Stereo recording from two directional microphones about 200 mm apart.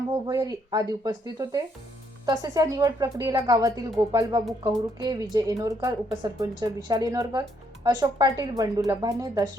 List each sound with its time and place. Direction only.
0.3 s speech: 20° right (ahead or behind)